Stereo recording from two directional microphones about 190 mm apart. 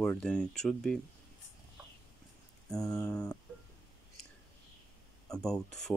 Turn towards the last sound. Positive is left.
turn(degrees=0)  # may be behind; listen again after turning